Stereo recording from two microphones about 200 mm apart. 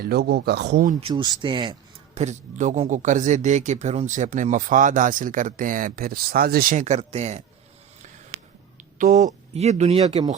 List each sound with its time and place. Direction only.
0.0 s speech: 55° right (ahead or behind)
1.0 s speech: 20° right (ahead or behind)
2.1 s speech: 35° right (ahead or behind)
8.8 s speech: 40° right (ahead or behind)